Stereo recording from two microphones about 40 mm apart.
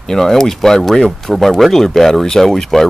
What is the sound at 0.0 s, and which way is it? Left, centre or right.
A man's voice, centre.